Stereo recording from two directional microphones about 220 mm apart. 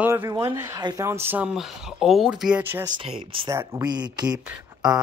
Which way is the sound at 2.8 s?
20° right (ahead or behind).